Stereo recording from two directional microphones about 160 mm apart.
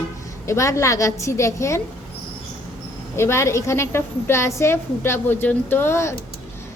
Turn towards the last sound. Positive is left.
turn(degrees=15)  # may be behind; listen again after turning